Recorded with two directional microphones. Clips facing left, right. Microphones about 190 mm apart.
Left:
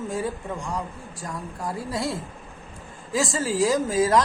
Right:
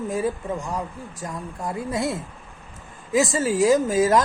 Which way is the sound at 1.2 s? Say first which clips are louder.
Right 1 dB; 20° right (ahead or behind).